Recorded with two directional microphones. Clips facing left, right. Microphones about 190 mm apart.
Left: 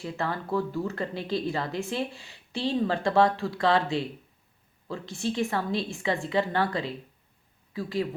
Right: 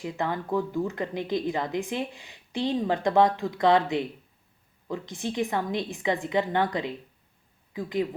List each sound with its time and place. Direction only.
0.0 s a woman's voice: 15° right (ahead or behind)